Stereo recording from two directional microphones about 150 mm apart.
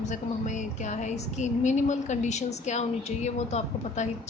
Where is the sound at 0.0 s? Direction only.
55° left (ahead or behind).